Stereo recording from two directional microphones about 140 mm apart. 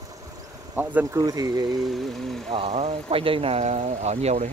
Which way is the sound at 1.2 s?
25° right (ahead or behind).